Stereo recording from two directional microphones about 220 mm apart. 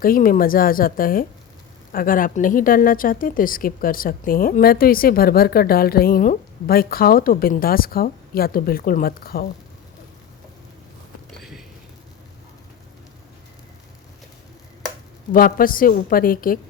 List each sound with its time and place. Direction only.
0.0 s speech: 40° left (ahead or behind)
15.3 s speech: 40° left (ahead or behind)